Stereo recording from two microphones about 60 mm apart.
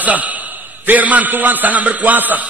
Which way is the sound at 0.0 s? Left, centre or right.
Right.